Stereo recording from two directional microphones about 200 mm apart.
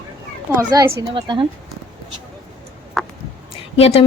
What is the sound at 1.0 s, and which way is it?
Speech, 25° right (ahead or behind).